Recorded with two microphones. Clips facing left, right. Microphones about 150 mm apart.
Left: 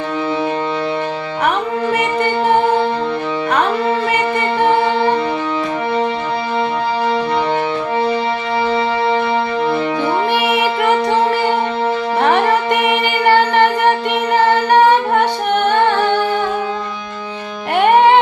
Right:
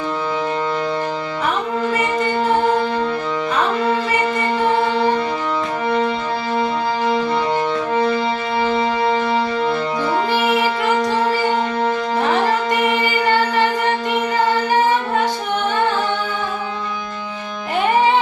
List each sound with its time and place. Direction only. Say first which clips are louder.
1.5 s music: left 3 dB; 65° left (ahead or behind)
10.3 s music: left 2 dB; 65° left (ahead or behind)
12.9 s music: left 4 dB; 65° left (ahead or behind)
14.7 s music: left 5 dB; 65° left (ahead or behind)
17.7 s music: left 5 dB; 65° left (ahead or behind)